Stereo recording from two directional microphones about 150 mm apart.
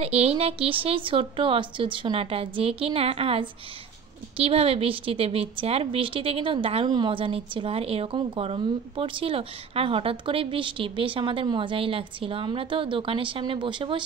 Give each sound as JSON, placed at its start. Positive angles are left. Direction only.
{"t": 0.0, "sound": "a woman's voice", "side_deg": -45}